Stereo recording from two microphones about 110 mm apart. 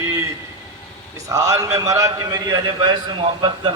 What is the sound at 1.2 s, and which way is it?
Speech, 30° right (ahead or behind).